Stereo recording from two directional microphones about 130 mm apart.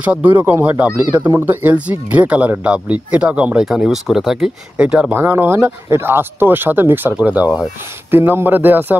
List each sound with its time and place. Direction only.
0.0 s speech: 10° right (ahead or behind)